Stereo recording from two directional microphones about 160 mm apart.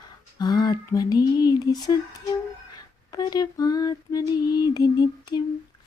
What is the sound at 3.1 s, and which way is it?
Female singing, 25° left (ahead or behind).